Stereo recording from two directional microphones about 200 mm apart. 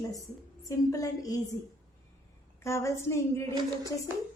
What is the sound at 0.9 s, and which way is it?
Speech, 15° left (ahead or behind).